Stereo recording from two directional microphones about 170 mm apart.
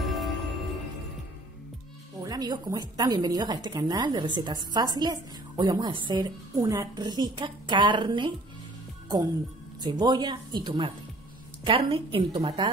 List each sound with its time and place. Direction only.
0.0 s music: centre (ahead or behind)
2.2 s speech: 20° right (ahead or behind)
9.8 s a woman's voice: 25° right (ahead or behind)